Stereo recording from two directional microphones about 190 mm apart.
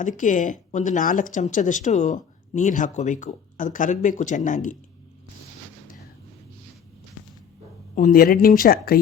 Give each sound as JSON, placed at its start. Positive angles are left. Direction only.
{"t": 0.0, "sound": "speech", "side_deg": 40}
{"t": 7.9, "sound": "speech", "side_deg": 45}